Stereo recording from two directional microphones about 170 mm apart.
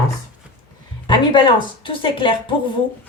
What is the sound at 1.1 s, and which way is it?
Speech, 30° left (ahead or behind).